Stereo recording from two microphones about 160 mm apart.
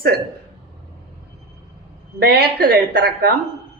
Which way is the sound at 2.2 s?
80° right.